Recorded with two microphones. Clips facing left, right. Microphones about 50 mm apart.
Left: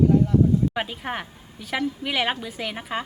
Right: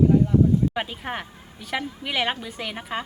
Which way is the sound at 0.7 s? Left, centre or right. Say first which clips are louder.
Left 1 dB; centre.